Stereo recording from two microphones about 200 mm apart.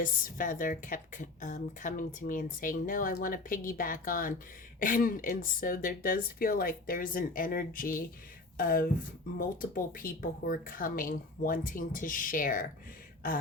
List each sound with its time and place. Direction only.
0.0 s a woman's voice: 45° left (ahead or behind)